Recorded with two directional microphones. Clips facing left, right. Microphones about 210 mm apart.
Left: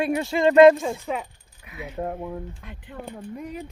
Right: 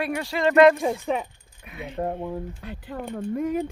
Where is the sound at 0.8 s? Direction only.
25° right (ahead or behind).